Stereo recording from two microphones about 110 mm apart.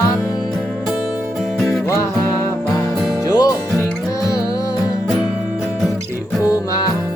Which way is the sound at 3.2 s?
35° left (ahead or behind).